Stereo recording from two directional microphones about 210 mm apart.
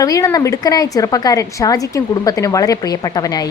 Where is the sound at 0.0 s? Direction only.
15° left (ahead or behind).